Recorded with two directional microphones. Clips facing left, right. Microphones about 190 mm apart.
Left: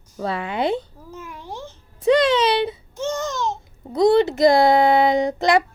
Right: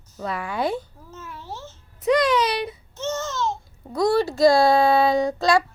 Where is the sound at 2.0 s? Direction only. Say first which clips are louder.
Left 3 dB; 25° left (ahead or behind).